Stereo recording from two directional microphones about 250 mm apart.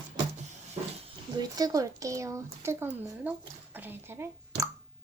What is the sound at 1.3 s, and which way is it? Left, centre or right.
Speech, centre.